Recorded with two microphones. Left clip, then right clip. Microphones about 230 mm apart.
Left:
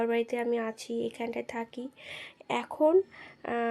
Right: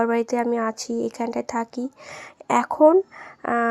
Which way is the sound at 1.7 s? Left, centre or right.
Right.